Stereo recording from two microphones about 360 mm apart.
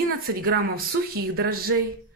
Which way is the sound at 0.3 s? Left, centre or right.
Right.